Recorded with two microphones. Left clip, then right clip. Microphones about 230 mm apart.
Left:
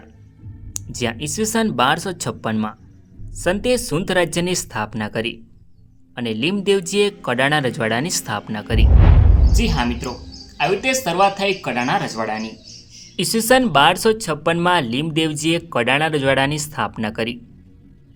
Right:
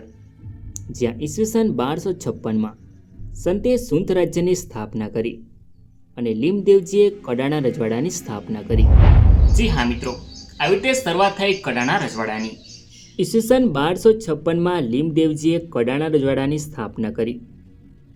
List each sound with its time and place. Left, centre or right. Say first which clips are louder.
0.7 s speech: even; left
9.6 s speech: even; centre
13.1 s speech: left 1 dB; left